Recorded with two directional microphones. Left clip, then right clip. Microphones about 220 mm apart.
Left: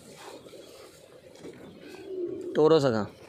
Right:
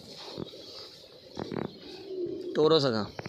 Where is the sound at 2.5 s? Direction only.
25° left (ahead or behind).